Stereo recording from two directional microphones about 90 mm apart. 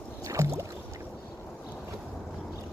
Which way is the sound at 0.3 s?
35° right (ahead or behind).